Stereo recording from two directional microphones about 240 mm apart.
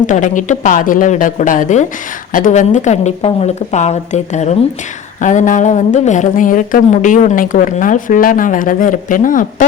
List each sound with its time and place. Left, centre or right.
0.1 s a woman's voice: left